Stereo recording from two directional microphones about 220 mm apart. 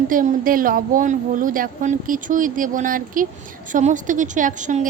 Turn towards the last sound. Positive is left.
turn(degrees=-35)  # may be behind; listen again after turning